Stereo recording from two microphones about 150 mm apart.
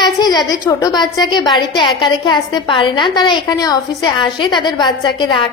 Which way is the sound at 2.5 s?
35° left (ahead or behind).